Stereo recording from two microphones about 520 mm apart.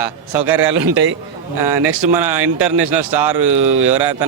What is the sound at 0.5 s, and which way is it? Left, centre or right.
Speech, right.